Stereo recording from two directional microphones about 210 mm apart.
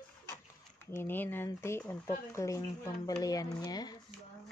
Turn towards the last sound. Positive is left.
turn(degrees=20)  # may be behind; listen again after turning